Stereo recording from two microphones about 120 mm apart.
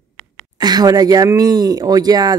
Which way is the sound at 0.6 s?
35° right (ahead or behind).